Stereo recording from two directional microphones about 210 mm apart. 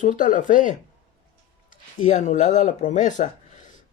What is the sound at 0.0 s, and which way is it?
Speech, 40° left (ahead or behind).